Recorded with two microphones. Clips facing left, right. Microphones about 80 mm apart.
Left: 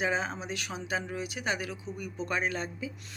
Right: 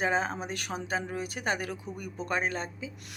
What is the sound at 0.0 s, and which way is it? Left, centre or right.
Speech, right.